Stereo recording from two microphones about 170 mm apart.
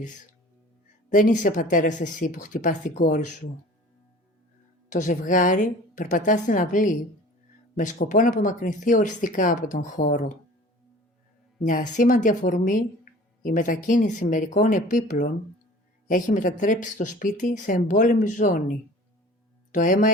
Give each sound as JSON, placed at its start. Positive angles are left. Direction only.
{"t": 1.1, "sound": "speech", "side_deg": 50}
{"t": 4.9, "sound": "speech", "side_deg": 45}
{"t": 11.6, "sound": "speech", "side_deg": 50}